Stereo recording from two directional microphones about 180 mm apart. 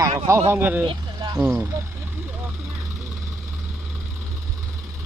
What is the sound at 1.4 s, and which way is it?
Speech, 10° right (ahead or behind).